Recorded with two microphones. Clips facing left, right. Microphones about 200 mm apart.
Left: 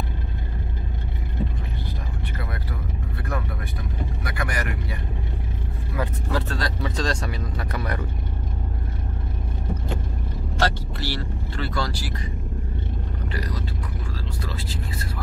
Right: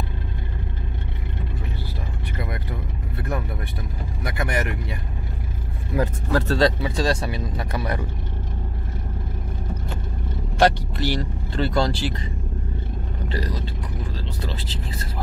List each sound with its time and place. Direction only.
4.2 s vehicle: 25° right (ahead or behind)
5.9 s vehicle: 35° right (ahead or behind)
6.8 s speech: 10° right (ahead or behind)
10.6 s speech: 15° right (ahead or behind)
13.3 s speech: 25° right (ahead or behind)